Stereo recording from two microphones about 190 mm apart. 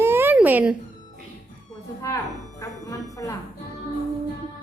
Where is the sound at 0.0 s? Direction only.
10° right (ahead or behind).